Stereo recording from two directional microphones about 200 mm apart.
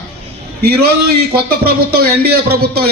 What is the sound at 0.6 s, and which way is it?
A man's voice, 50° right (ahead or behind).